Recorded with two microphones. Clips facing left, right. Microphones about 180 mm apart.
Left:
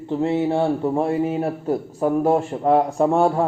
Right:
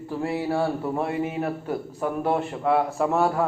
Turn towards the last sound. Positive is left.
turn(degrees=30)  # may be behind; listen again after turning